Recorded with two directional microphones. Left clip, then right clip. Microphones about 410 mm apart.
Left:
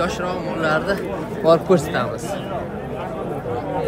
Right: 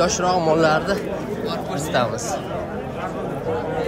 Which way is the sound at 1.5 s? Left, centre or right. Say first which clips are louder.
Left 15 dB; centre.